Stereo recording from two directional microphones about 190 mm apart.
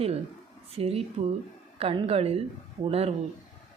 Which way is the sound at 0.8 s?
30° right (ahead or behind).